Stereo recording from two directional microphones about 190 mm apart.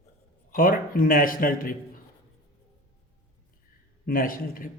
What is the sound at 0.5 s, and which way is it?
Speech, 45° left (ahead or behind).